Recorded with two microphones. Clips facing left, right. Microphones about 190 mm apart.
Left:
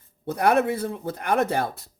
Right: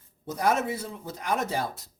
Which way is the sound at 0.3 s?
60° left (ahead or behind).